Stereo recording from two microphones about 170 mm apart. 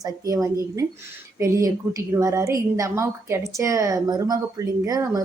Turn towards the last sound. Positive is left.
turn(degrees=-20)  # may be behind; listen again after turning